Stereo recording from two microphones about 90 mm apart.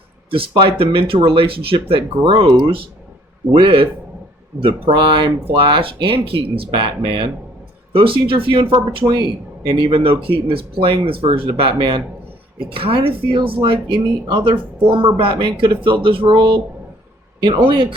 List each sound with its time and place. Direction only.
0.3 s speech: 75° right (ahead or behind)
6.7 s speech: 60° right (ahead or behind)
7.9 s speech: 80° right
9.6 s speech: 55° right (ahead or behind); by 11.7 s 85° right
11.8 s speech: 60° right (ahead or behind)
12.5 s speech: 85° right; by 17.8 s 60° right (ahead or behind)